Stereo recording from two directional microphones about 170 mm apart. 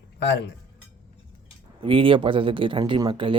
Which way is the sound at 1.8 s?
30° right (ahead or behind).